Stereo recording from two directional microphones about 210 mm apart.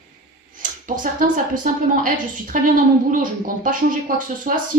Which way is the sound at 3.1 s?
40° right (ahead or behind).